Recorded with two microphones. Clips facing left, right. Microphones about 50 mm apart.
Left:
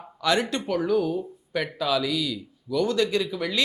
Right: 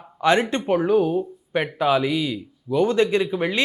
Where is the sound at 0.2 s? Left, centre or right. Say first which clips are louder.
Right 5 dB; right.